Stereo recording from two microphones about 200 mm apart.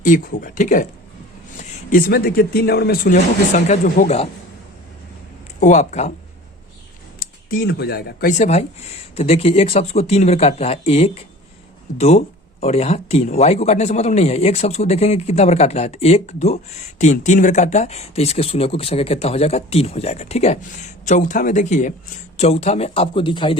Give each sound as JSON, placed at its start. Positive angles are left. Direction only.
{"t": 0.0, "sound": "speech", "side_deg": 40}
{"t": 5.5, "sound": "speech", "side_deg": 40}
{"t": 7.2, "sound": "a man's voice", "side_deg": 50}